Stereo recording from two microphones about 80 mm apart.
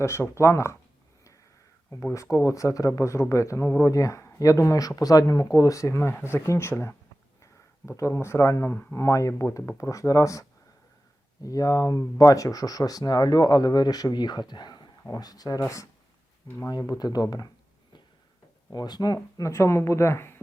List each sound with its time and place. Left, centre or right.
0.0 s speech: left
2.1 s speech: left
8.7 s speech: left
9.0 s speech: left
11.4 s speech: left
15.1 s speech: left
16.6 s speech: left
18.7 s speech: left
19.5 s speech: left